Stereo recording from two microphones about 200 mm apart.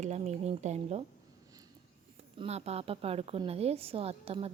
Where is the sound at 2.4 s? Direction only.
30° right (ahead or behind).